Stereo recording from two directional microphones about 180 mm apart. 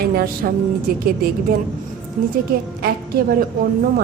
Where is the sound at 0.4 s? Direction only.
55° right (ahead or behind).